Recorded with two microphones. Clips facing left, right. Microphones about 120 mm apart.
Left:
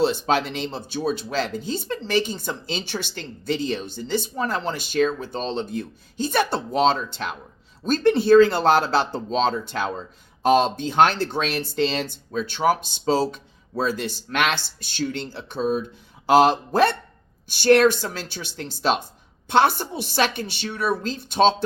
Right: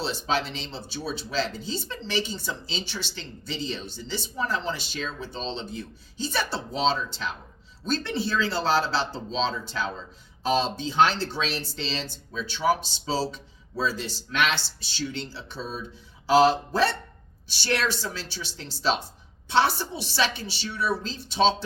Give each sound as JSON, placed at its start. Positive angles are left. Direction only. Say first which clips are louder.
{"t": 0.0, "sound": "speech", "louder": "left 7 dB", "side_deg": 55}